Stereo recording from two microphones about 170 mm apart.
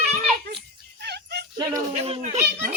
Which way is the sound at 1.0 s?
75° right (ahead or behind).